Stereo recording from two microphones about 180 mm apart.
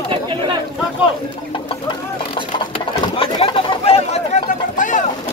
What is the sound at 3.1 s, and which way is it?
Chatter, 30° left (ahead or behind).